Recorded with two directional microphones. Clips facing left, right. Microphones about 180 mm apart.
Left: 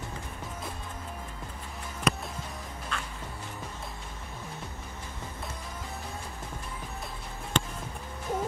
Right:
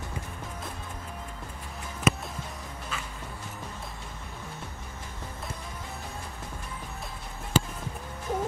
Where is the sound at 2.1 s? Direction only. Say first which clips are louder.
Right 3 dB; 5° right (ahead or behind).